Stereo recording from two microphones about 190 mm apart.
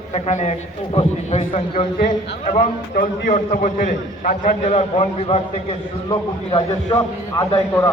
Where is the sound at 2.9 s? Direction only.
50° left (ahead or behind).